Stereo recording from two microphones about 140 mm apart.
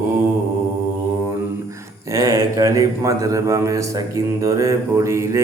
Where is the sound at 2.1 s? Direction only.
25° right (ahead or behind).